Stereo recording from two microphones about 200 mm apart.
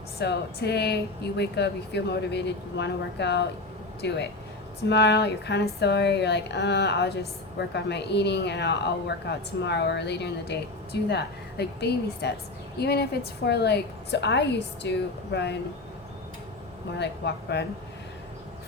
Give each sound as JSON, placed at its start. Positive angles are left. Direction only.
{"t": 0.2, "sound": "a woman's voice", "side_deg": 55}
{"t": 17.0, "sound": "speech", "side_deg": 60}